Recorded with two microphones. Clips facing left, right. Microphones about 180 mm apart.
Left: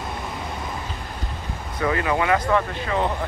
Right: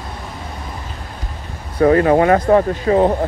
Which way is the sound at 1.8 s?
45° right (ahead or behind).